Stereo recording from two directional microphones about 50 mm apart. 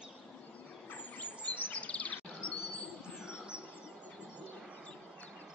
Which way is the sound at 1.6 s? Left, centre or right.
Left.